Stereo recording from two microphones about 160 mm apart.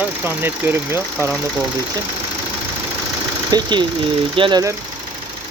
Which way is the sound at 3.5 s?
30° right (ahead or behind).